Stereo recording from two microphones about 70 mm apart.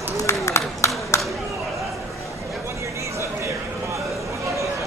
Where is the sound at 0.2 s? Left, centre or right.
Left.